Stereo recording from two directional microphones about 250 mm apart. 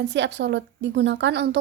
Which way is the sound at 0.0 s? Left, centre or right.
Right.